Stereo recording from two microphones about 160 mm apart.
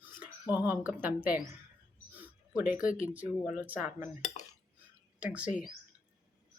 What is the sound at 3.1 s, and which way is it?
Speech, 10° right (ahead or behind).